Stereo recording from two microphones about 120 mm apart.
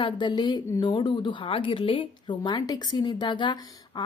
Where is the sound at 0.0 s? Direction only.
40° left (ahead or behind).